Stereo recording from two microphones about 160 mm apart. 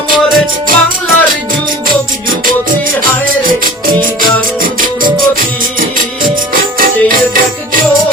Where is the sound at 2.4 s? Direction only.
60° right (ahead or behind).